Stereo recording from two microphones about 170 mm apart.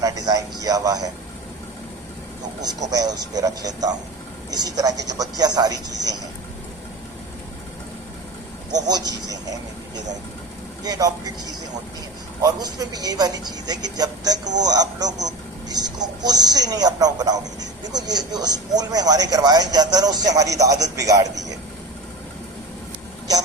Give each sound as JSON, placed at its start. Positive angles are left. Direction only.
{"t": 0.0, "sound": "speech", "side_deg": -20}
{"t": 2.6, "sound": "a man's voice", "side_deg": -20}
{"t": 8.7, "sound": "a man's voice", "side_deg": -25}
{"t": 10.8, "sound": "a man's voice", "side_deg": -20}
{"t": 12.4, "sound": "a man's voice", "side_deg": -20}